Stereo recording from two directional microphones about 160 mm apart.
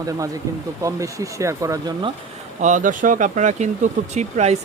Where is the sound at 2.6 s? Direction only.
55° right (ahead or behind).